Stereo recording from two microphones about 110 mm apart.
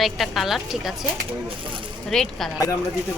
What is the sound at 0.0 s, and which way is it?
Speech, centre (ahead or behind).